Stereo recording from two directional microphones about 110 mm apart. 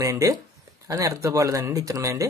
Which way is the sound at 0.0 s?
30° right (ahead or behind).